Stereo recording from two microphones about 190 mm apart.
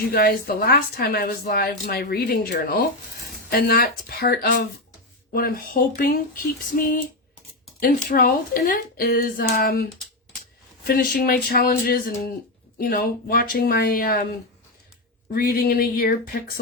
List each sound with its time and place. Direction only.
0.0 s a woman's voice: 55° left (ahead or behind)
8.1 s a woman's voice: 50° left (ahead or behind)
10.8 s a woman's voice: 50° left (ahead or behind)
15.3 s a woman's voice: 50° left (ahead or behind)